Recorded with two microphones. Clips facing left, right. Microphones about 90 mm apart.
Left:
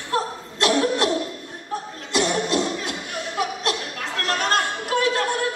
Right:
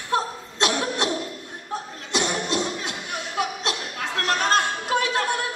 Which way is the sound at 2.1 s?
25° right (ahead or behind).